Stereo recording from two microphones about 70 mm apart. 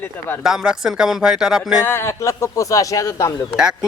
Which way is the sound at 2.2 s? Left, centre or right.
Left.